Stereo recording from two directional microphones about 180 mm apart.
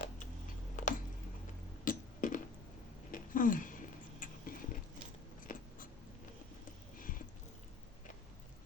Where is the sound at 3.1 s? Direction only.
50° left (ahead or behind).